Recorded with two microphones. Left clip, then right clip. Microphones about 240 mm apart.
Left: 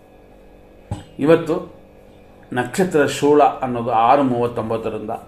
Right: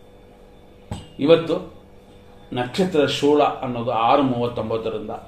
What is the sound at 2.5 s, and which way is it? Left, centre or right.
Speech, left.